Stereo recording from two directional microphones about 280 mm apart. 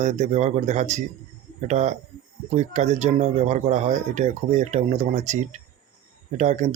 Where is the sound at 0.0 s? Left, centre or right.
Right.